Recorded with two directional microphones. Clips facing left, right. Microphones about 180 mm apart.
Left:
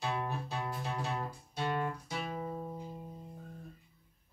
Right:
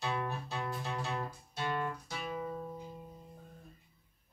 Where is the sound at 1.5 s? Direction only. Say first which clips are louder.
Left 1 dB; 15° left (ahead or behind).